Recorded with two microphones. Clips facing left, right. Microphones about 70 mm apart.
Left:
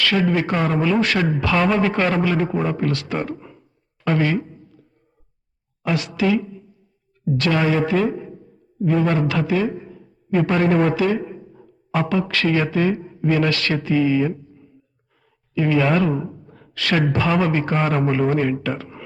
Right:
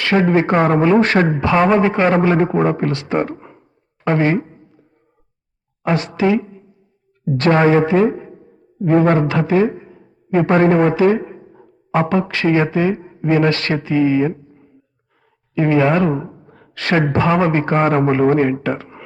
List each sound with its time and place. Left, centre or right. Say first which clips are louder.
0.0 s a man's voice: right 5 dB; right
2.1 s a man's voice: right 6 dB; right
4.6 s a sound: even; right
5.8 s a woman's voice: right 4 dB; right
9.8 s a sound: left 1 dB; right
10.8 s a man's voice: right 4 dB; right
11.0 s a man's voice: right 6 dB; right